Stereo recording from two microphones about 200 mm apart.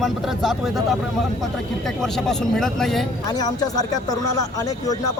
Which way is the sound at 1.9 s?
Centre (ahead or behind).